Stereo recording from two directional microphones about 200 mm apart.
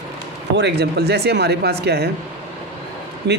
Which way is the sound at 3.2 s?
60° right (ahead or behind).